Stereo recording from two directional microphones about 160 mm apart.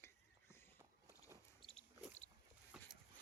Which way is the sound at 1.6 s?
35° left (ahead or behind).